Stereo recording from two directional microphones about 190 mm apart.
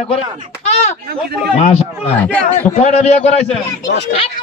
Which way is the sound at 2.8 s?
35° left (ahead or behind).